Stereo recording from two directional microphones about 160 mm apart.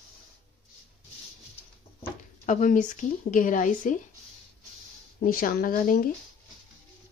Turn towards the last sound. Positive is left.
turn(degrees=60)  # may be behind; listen again after turning